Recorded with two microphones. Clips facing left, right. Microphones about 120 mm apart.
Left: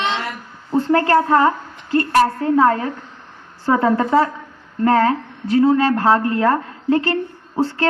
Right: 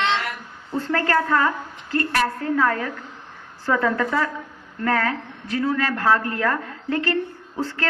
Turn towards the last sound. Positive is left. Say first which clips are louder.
# left 7 dB
turn(degrees=30)  # may be behind; listen again after turning